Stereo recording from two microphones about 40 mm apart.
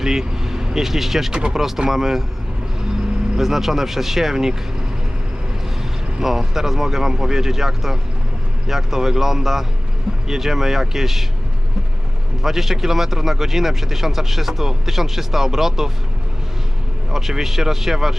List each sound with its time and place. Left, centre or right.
0.0 s speech: centre
1.3 s speech: right
1.5 s speech: centre
3.3 s speech: centre
6.2 s speech: centre
12.4 s speech: centre
17.1 s speech: centre